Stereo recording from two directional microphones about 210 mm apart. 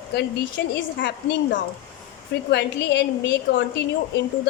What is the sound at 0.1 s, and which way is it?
A woman's voice, 50° left (ahead or behind).